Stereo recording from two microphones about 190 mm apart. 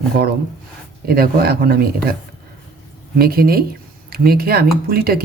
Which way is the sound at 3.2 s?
50° right (ahead or behind).